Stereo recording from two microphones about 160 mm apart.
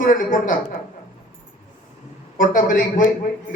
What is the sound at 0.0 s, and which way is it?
Speech, 55° left (ahead or behind).